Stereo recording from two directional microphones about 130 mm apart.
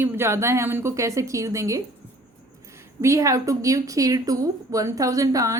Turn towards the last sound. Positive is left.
turn(degrees=-25)  # may be behind; listen again after turning